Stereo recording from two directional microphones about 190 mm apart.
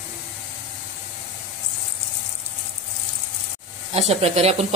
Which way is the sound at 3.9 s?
35° right (ahead or behind).